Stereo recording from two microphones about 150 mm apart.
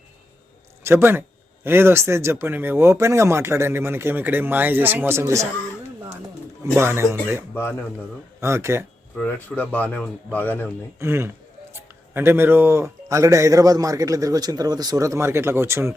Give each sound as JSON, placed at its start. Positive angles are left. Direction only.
{"t": 0.9, "sound": "speech", "side_deg": -15}
{"t": 6.7, "sound": "speech", "side_deg": -15}
{"t": 9.1, "sound": "speech", "side_deg": 10}
{"t": 11.0, "sound": "speech", "side_deg": -15}